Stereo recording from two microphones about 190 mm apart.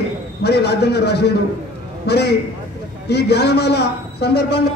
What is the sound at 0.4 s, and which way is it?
A man's voice, 60° left (ahead or behind).